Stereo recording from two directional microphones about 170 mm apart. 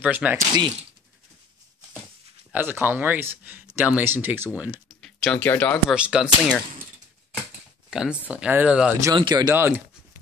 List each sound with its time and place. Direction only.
0.0 s speech: 10° right (ahead or behind)
2.5 s speech: 10° right (ahead or behind); by 5.9 s 5° left (ahead or behind)
5.9 s speech: 5° right (ahead or behind)
7.9 s speech: 5° right (ahead or behind)
9.0 s speech: 25° right (ahead or behind)
9.5 s speech: 10° right (ahead or behind)